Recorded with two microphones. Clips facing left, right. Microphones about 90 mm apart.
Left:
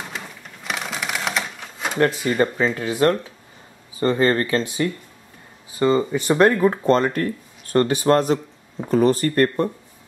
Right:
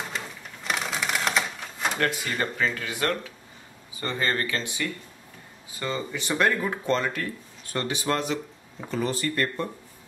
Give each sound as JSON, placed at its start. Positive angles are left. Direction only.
{"t": 0.7, "sound": "typewriter", "side_deg": 0}
{"t": 2.2, "sound": "speech", "side_deg": 15}
{"t": 2.5, "sound": "speech", "side_deg": 30}